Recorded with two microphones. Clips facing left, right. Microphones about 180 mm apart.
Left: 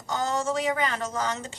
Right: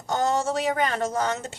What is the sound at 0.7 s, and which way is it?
Speech, 50° right (ahead or behind).